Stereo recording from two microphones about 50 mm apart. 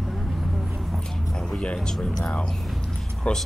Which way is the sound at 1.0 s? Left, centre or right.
Centre.